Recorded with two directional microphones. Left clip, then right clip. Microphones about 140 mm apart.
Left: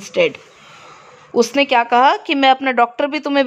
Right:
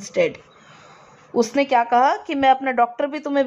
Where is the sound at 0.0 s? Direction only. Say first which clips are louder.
Left 4 dB; 55° left (ahead or behind).